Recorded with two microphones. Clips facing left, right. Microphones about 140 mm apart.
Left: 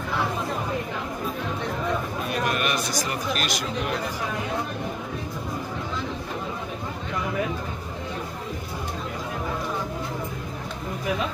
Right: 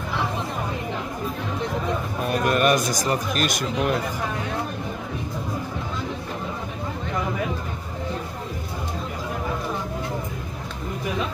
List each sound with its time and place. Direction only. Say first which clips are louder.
2.2 s speech: right 8 dB; 45° right (ahead or behind)